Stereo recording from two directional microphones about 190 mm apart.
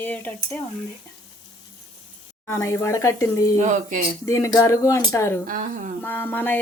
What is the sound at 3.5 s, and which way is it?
Speech, 40° right (ahead or behind).